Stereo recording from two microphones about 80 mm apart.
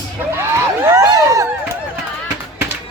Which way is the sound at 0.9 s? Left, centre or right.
Right.